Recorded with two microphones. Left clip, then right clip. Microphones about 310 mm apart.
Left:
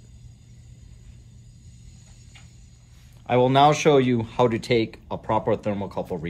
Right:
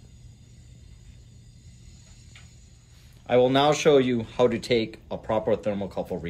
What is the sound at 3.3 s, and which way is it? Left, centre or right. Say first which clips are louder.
Speech: left 2 dB; centre.